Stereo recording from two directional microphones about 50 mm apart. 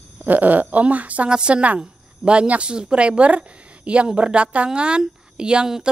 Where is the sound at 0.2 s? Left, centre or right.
Right.